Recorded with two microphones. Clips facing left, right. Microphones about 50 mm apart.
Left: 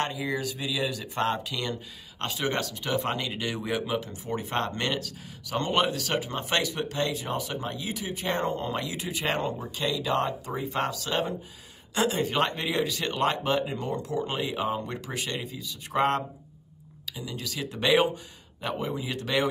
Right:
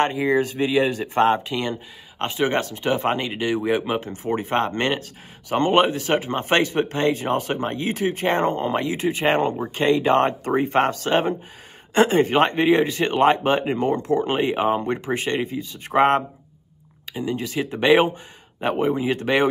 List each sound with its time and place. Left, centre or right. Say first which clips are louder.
0.0 s speech: right 10 dB; right